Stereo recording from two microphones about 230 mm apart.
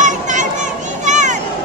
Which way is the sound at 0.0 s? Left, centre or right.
Right.